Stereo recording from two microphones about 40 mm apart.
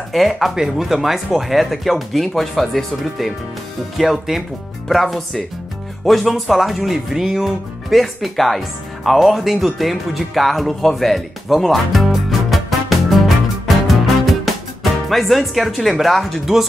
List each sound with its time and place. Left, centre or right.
0.1 s speech: centre
10.8 s music: centre